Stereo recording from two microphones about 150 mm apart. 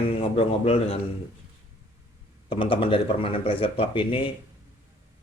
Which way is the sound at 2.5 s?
35° left (ahead or behind).